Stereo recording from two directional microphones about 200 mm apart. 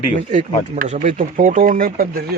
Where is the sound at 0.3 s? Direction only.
40° right (ahead or behind).